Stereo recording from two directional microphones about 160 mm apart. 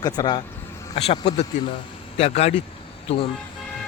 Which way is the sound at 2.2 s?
40° left (ahead or behind).